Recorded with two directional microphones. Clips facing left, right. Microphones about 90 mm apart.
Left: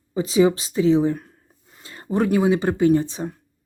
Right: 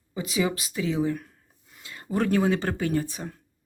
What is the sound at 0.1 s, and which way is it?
Speech, 30° left (ahead or behind).